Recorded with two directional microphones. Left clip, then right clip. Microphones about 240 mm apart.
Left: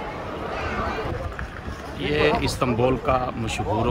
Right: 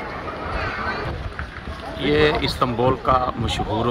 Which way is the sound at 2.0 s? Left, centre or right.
Centre.